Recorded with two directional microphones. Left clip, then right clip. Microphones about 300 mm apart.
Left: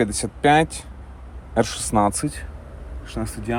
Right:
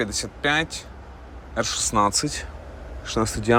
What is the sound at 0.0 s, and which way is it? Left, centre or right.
Speech, centre.